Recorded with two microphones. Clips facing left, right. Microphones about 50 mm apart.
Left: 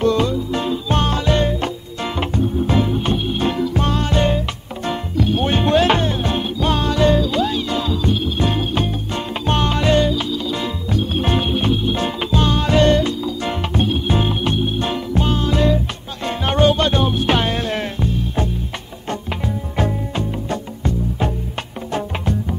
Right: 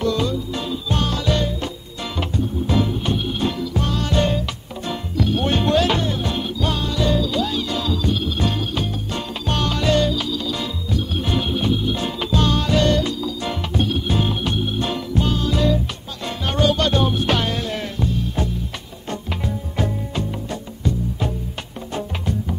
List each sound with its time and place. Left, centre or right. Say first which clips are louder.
0.0 s music: left 4 dB; left
7.4 s music: left 3 dB; left
10.9 s music: left 4 dB; left
12.3 s music: left 1 dB; left